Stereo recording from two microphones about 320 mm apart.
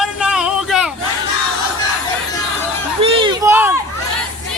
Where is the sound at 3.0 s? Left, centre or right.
Centre.